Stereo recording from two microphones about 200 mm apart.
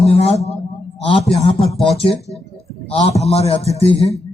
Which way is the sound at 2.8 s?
30° left (ahead or behind).